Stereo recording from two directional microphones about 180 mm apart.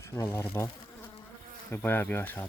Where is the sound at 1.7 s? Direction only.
10° left (ahead or behind).